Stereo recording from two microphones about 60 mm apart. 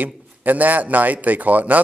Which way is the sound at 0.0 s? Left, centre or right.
Right.